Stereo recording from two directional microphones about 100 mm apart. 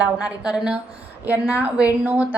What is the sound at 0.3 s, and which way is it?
A woman's voice, 10° right (ahead or behind).